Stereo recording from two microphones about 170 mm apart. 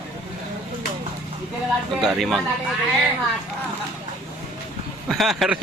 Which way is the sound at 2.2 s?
Centre (ahead or behind).